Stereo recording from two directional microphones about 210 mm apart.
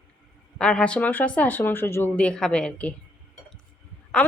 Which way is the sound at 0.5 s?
5° left (ahead or behind).